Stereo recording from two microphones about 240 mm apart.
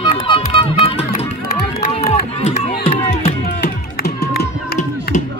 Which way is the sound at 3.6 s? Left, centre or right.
Left.